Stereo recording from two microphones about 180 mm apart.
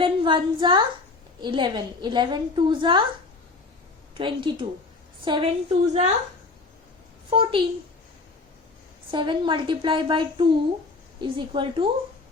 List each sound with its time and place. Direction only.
0.0 s a woman's voice: 25° right (ahead or behind)
4.2 s a woman's voice: 25° right (ahead or behind)
7.3 s a woman's voice: 30° right (ahead or behind)
9.0 s a woman's voice: 25° right (ahead or behind)